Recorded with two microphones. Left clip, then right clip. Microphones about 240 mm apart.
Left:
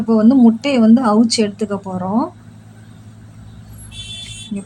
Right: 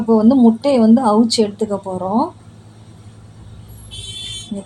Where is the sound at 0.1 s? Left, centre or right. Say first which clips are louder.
Even; centre.